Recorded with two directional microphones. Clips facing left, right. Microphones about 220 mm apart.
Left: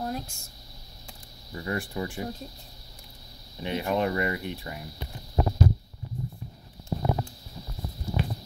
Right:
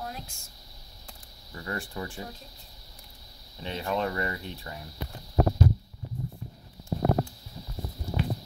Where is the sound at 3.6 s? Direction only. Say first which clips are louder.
Left 3 dB; 15° left (ahead or behind).